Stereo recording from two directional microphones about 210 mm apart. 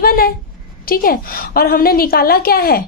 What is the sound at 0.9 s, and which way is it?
A woman's voice, 45° left (ahead or behind).